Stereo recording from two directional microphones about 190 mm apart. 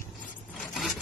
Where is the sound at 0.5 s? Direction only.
Centre (ahead or behind).